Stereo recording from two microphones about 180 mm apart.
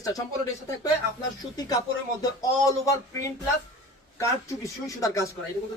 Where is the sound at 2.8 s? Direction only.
20° left (ahead or behind).